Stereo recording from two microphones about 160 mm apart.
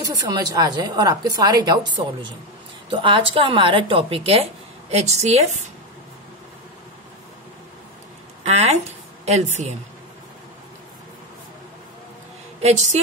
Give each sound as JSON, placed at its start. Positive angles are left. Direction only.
{"t": 0.0, "sound": "a woman's voice", "side_deg": -20}
{"t": 8.5, "sound": "a woman's voice", "side_deg": -40}
{"t": 12.6, "sound": "a woman's voice", "side_deg": -45}